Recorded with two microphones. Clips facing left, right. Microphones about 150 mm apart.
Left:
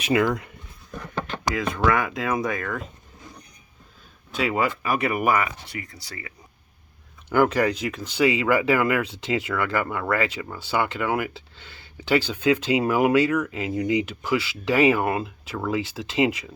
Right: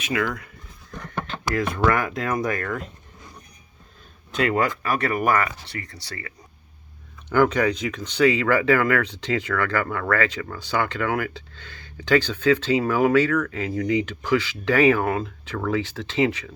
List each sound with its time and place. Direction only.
0.0 s speech: 25° left (ahead or behind)
1.5 s speech: centre (ahead or behind)
4.3 s speech: 5° left (ahead or behind)
7.3 s speech: 10° left (ahead or behind)